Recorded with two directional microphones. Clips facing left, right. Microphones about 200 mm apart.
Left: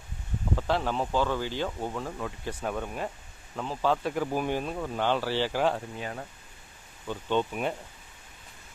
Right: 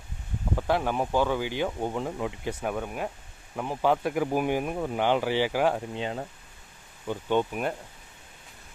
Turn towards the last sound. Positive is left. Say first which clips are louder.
# right 2 dB
turn(degrees=-15)  # may be behind; listen again after turning